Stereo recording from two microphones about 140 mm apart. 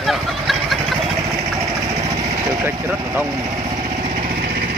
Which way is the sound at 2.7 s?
15° right (ahead or behind).